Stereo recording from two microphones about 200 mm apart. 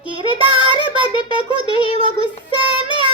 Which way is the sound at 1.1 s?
25° left (ahead or behind).